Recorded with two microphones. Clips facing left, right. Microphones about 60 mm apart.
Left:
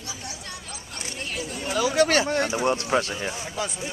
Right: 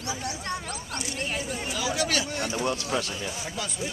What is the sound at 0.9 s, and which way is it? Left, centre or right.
Speech, right.